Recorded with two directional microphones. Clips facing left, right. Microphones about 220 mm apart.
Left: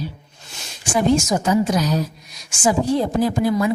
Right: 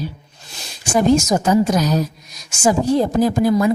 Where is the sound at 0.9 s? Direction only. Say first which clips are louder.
Right 3 dB; 45° right (ahead or behind).